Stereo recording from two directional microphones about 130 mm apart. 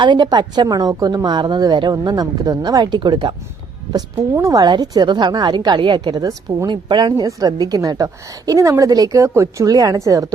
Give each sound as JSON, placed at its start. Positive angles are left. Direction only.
{"t": 0.0, "sound": "a woman's voice", "side_deg": -35}